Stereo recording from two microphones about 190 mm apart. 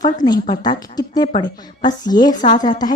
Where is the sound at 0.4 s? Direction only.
25° left (ahead or behind).